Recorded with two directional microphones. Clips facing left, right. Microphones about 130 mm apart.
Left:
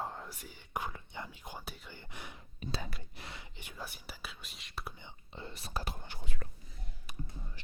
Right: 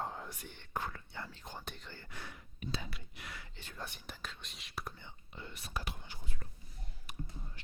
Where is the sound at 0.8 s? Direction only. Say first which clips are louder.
Left 1 dB; 15° left (ahead or behind).